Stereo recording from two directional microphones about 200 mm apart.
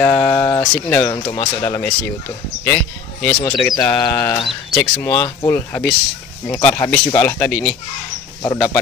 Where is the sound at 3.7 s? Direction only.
20° left (ahead or behind).